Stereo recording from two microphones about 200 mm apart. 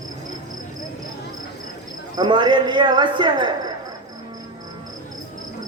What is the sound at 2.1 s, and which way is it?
Speech, 20° right (ahead or behind).